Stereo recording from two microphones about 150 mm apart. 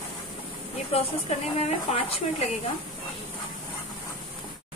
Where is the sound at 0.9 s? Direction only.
45° left (ahead or behind).